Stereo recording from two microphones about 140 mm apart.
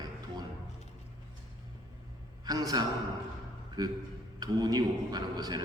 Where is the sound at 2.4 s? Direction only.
25° right (ahead or behind).